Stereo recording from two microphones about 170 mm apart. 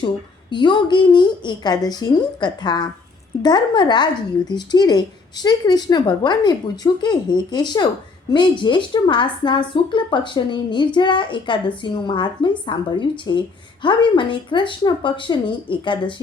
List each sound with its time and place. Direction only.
0.5 s a woman's voice: 25° left (ahead or behind)